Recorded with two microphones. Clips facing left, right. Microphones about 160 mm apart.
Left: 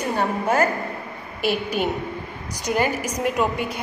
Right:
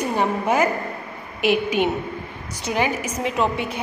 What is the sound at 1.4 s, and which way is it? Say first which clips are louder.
Speech: right 4 dB; 40° left (ahead or behind).